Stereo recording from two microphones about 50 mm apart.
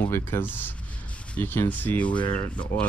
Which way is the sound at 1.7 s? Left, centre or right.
Left.